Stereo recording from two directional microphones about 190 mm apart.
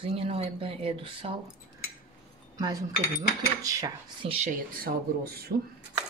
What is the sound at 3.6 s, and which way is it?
Dishes, 20° right (ahead or behind).